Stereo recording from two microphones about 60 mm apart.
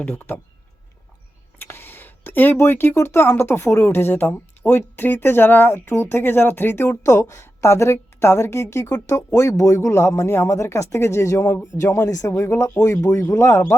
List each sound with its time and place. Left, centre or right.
0.1 s speech: left
1.5 s a sound: left
2.6 s speech: left
6.8 s a woman's voice: left
12.3 s speech: left